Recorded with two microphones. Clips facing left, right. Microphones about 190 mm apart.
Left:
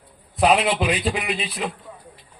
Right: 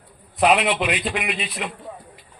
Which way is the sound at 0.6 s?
35° left (ahead or behind).